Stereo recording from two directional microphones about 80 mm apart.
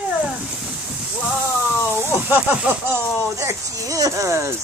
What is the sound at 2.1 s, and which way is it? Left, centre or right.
Speech, right.